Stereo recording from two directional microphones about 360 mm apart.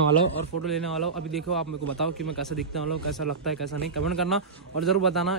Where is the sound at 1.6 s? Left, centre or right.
Right.